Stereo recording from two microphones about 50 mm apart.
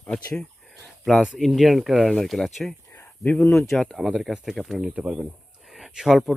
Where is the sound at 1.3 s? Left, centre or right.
Centre.